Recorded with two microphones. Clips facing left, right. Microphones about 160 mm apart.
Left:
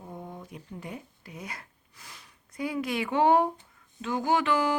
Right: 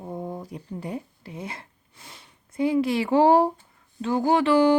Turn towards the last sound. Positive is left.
turn(degrees=-35)  # may be behind; listen again after turning